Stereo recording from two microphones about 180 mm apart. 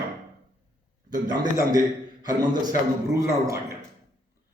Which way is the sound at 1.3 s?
20° right (ahead or behind).